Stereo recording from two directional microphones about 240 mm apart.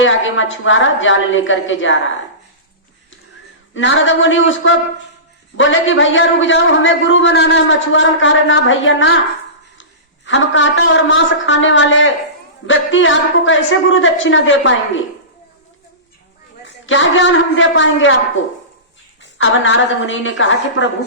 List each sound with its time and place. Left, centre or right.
0.0 s a man's voice: left
3.8 s a man's voice: left
10.2 s a man's voice: left
16.6 s a man's voice: left
19.2 s a man's voice: left